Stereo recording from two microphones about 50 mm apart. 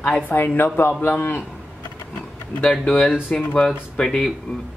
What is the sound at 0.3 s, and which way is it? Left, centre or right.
Speech, left.